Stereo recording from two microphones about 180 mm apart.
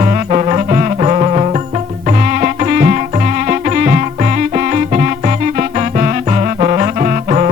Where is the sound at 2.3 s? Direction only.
50° right (ahead or behind).